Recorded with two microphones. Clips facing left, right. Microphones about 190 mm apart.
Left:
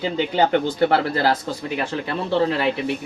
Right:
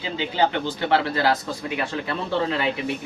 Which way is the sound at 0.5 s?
45° left (ahead or behind).